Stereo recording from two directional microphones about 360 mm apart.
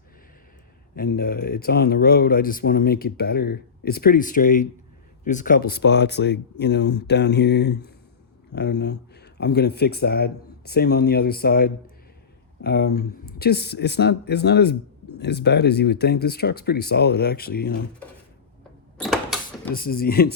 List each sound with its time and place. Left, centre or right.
0.9 s speech: left
18.9 s a sound: centre
19.7 s speech: left